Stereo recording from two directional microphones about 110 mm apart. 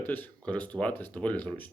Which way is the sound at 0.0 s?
15° left (ahead or behind).